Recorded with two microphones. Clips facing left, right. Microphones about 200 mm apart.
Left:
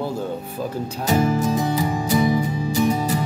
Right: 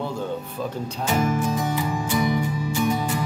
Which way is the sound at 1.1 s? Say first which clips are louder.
Left 4 dB; 30° left (ahead or behind).